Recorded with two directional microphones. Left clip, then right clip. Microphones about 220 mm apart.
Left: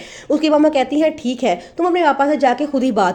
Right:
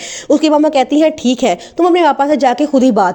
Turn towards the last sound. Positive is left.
turn(degrees=-25)  # may be behind; listen again after turning